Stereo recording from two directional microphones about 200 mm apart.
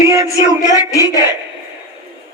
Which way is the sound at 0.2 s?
20° left (ahead or behind).